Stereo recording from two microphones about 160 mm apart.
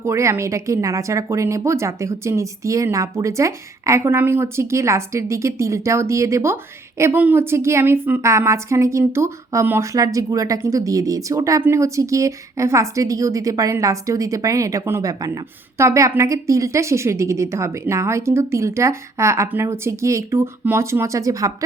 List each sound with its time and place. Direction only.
0.0 s a woman's voice: 20° right (ahead or behind)